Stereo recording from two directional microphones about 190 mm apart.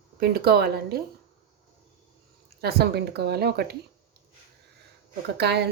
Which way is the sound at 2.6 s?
60° right (ahead or behind).